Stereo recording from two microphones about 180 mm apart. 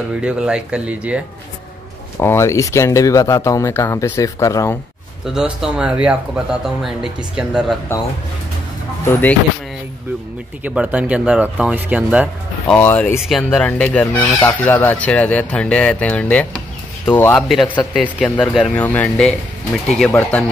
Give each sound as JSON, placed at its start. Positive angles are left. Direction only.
{"t": 0.2, "sound": "speech", "side_deg": -5}
{"t": 2.1, "sound": "speech", "side_deg": 15}
{"t": 5.2, "sound": "speech", "side_deg": -5}
{"t": 9.0, "sound": "speech", "side_deg": 10}
{"t": 10.6, "sound": "speech", "side_deg": -5}
{"t": 12.6, "sound": "speech", "side_deg": 10}
{"t": 13.3, "sound": "speech", "side_deg": 0}